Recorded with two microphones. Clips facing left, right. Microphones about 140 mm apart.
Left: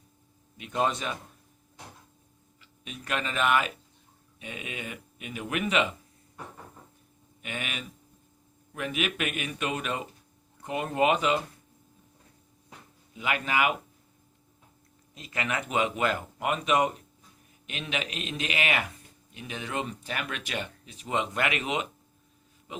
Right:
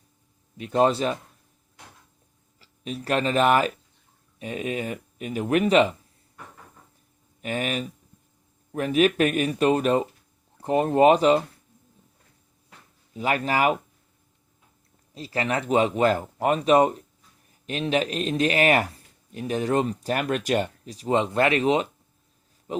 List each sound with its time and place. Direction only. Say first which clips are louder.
0.5 s speech: right 7 dB; 35° right (ahead or behind)
2.6 s speech: right 10 dB; 35° right (ahead or behind)
7.4 s speech: right 9 dB; 40° right (ahead or behind)
13.1 s speech: right 5 dB; 35° right (ahead or behind)
15.1 s speech: right 6 dB; 35° right (ahead or behind)